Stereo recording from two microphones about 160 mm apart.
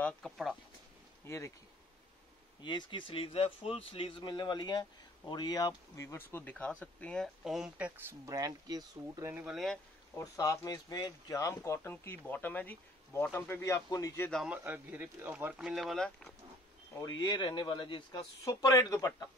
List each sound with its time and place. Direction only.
0.0 s speech: centre (ahead or behind)
1.2 s speech: 20° left (ahead or behind)
2.6 s a man's voice: 30° left (ahead or behind); by 8.2 s 5° right (ahead or behind)
8.3 s speech: 20° right (ahead or behind)
10.1 s speech: 20° left (ahead or behind)
14.3 s speech: 5° right (ahead or behind)
17.0 s a man's voice: 30° left (ahead or behind)